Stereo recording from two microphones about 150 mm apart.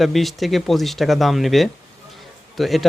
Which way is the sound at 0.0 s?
Centre (ahead or behind).